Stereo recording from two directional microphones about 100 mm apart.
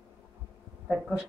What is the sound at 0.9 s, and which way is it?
Speech, 5° right (ahead or behind).